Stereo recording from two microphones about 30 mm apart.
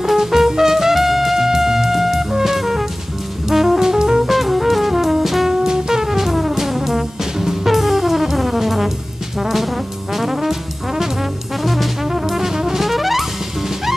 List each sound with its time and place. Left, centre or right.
0.0 s music: centre
4.3 s music: centre
9.4 s brass instrument: centre
11.6 s music: centre
12.1 s brass instrument: centre
12.8 s brass instrument: centre